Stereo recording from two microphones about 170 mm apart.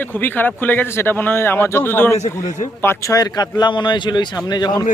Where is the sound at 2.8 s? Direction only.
15° left (ahead or behind).